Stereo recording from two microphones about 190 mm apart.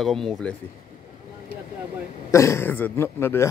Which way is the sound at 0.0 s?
Centre (ahead or behind).